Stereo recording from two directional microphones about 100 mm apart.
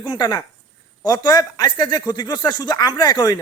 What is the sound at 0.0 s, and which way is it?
Speech, 45° left (ahead or behind).